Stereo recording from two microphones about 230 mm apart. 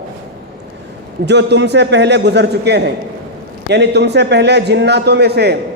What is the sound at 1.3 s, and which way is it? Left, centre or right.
A man's voice, right.